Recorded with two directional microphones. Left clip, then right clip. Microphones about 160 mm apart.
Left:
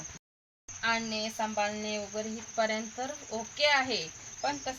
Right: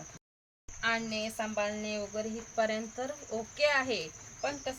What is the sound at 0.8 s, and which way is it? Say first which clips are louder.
Speech: left 1 dB; 45° right (ahead or behind).